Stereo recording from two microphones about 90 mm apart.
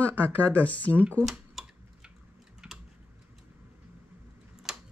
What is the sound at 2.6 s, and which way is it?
Tick-tock, 10° right (ahead or behind).